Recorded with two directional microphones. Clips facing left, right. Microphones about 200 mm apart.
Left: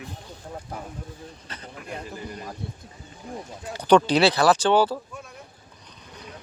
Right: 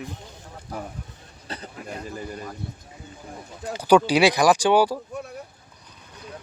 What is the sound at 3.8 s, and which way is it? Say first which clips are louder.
Speech: right 1 dB; 10° right (ahead or behind).